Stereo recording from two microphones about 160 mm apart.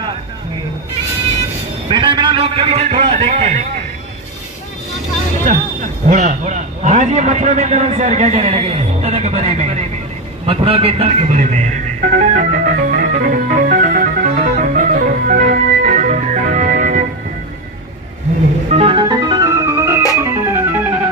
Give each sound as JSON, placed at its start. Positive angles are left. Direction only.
{"t": 1.9, "sound": "a man's voice", "side_deg": -30}
{"t": 6.0, "sound": "a man's voice", "side_deg": -50}
{"t": 12.2, "sound": "music", "side_deg": -55}
{"t": 18.7, "sound": "organ", "side_deg": -35}